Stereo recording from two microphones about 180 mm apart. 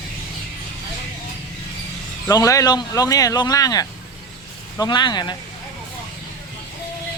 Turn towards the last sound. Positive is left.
turn(degrees=25)  # may be behind; listen again after turning